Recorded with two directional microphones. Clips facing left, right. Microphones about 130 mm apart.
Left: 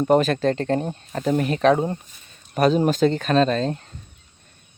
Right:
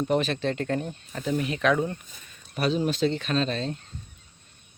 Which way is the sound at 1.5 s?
35° left (ahead or behind).